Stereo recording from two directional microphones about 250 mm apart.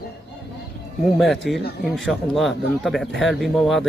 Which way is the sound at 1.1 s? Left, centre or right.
Centre.